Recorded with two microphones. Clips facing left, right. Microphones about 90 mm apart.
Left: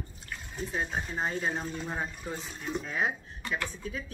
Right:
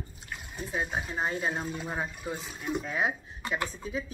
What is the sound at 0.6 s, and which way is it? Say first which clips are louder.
A woman's voice: right 1 dB; 5° right (ahead or behind).